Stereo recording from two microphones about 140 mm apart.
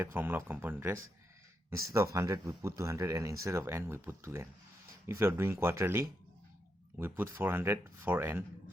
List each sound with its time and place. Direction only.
0.0 s speech: 15° right (ahead or behind)